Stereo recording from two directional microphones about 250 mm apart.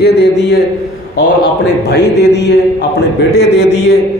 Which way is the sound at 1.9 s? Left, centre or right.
Left.